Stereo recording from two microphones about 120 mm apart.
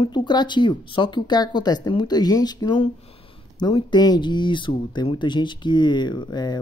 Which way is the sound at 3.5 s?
35° left (ahead or behind).